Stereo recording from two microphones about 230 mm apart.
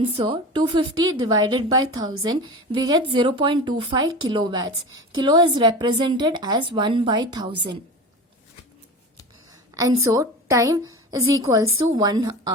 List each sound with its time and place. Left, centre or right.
0.1 s a woman's voice: right
9.7 s a woman's voice: centre